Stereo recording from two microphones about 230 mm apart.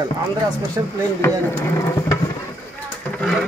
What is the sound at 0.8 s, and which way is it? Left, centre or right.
Speech, centre.